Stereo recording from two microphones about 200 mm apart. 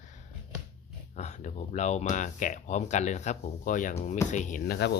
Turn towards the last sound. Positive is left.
turn(degrees=55)  # may be behind; listen again after turning